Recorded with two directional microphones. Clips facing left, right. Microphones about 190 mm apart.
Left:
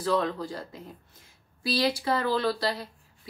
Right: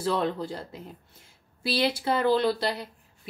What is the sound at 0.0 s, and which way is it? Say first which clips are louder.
A woman's voice: even; 25° right (ahead or behind).